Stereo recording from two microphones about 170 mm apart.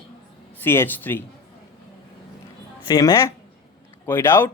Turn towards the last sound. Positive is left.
turn(degrees=15)  # may be behind; listen again after turning